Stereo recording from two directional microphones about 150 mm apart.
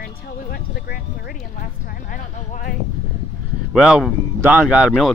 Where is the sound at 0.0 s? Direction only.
90° left; by 2.7 s 60° left (ahead or behind).